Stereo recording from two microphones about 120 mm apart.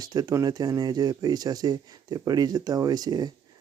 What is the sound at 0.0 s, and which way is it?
Speech, 35° right (ahead or behind).